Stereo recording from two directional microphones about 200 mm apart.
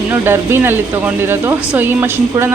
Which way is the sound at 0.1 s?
10° right (ahead or behind).